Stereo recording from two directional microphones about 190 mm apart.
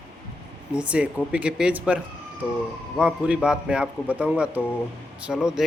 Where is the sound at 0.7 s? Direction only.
5° right (ahead or behind).